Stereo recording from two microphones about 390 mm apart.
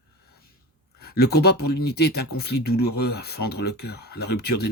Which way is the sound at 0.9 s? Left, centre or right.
Left.